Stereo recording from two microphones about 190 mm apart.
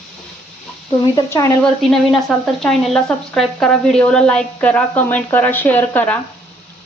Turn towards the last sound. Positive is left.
turn(degrees=10)  # may be behind; listen again after turning